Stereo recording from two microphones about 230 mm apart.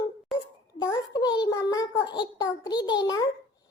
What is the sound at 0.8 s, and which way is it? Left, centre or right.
A child's voice, centre.